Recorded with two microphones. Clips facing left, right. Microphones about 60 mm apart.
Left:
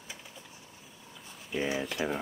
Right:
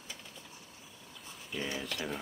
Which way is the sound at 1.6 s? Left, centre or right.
Centre.